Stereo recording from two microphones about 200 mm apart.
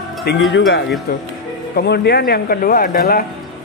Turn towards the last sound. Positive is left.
turn(degrees=45)  # may be behind; listen again after turning